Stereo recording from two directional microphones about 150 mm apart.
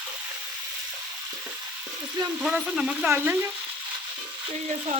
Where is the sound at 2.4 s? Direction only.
5° right (ahead or behind).